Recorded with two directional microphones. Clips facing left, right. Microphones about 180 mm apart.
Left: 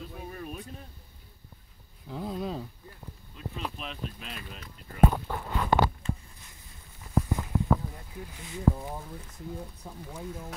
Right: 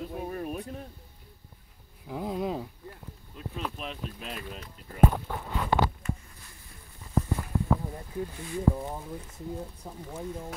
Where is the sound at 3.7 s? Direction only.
45° right (ahead or behind).